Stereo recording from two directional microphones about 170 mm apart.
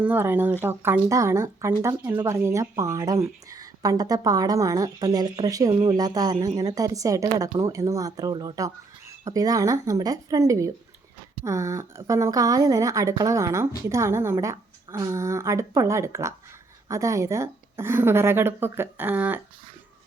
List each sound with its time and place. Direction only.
0.0 s a woman's voice: 10° right (ahead or behind)